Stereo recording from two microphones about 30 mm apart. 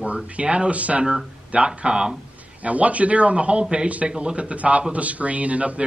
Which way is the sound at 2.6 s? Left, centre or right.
Right.